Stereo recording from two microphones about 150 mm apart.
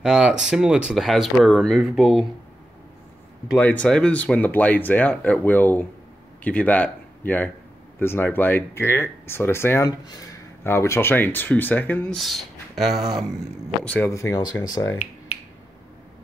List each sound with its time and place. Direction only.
0.0 s speech: 5° right (ahead or behind)
3.5 s speech: 10° left (ahead or behind)
12.2 s speech: centre (ahead or behind)
13.8 s speech: 15° left (ahead or behind)